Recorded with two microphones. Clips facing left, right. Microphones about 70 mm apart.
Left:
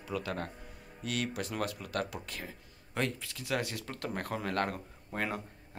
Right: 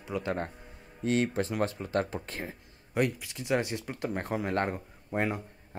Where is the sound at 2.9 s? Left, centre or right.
Centre.